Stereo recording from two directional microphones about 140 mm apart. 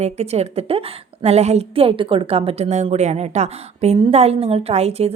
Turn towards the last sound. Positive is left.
turn(degrees=-45)  # may be behind; listen again after turning